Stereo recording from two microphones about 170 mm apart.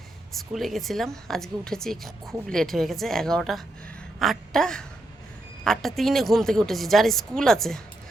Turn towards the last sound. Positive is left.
turn(degrees=0)  # may be behind; listen again after turning